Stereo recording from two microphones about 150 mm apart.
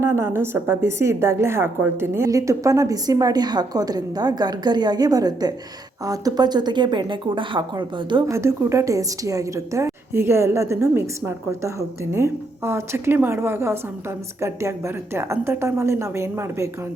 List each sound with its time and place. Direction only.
0.0 s a woman's voice: 15° right (ahead or behind)
8.3 s a woman's voice: 20° right (ahead or behind)